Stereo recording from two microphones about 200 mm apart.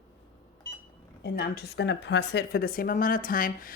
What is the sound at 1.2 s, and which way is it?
Speech, 55° left (ahead or behind).